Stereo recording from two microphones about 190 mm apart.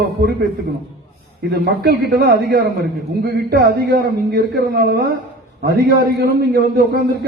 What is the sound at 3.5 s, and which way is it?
A man's voice, 60° right (ahead or behind).